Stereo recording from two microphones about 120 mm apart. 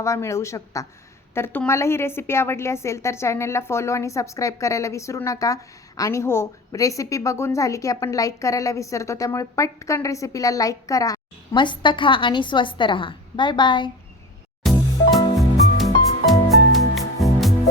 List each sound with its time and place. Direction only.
0.0 s a woman's voice: 25° left (ahead or behind)
11.5 s a woman's voice: 40° left (ahead or behind)
14.6 s music: centre (ahead or behind)